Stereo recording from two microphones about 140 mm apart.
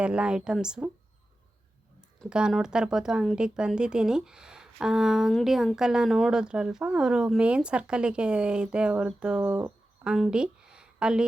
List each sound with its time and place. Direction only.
0.0 s speech: 10° right (ahead or behind)
2.0 s speech: 5° right (ahead or behind)
9.5 s speech: 15° right (ahead or behind)
10.0 s a woman's voice: 5° right (ahead or behind)